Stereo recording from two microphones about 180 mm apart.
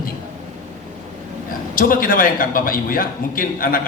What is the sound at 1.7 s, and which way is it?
A man's voice, 50° left (ahead or behind).